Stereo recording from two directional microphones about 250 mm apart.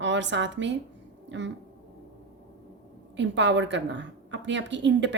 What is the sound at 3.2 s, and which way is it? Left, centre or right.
A woman's voice, right.